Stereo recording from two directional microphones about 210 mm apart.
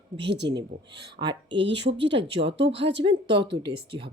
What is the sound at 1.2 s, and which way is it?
Speech, 20° right (ahead or behind).